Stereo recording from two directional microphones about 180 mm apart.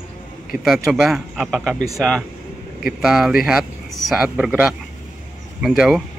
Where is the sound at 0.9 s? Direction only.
5° right (ahead or behind).